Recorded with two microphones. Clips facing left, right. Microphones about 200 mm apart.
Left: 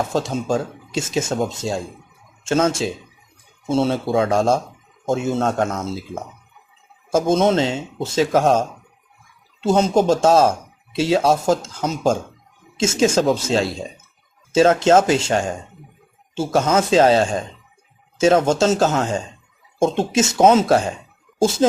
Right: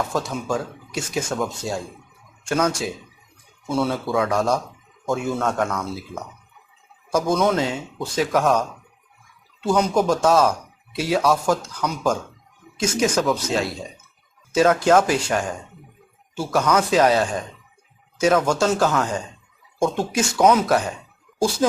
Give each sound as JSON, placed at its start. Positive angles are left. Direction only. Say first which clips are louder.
{"t": 0.1, "sound": "speech", "louder": "left 4 dB", "side_deg": 20}